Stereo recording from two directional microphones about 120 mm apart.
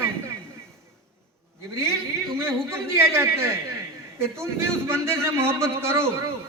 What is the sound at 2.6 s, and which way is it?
A man's voice, 20° right (ahead or behind).